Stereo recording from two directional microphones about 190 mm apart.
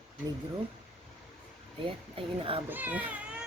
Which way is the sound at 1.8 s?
30° right (ahead or behind).